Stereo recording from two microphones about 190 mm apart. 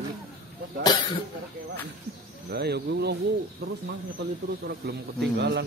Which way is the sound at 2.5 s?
60° right (ahead or behind).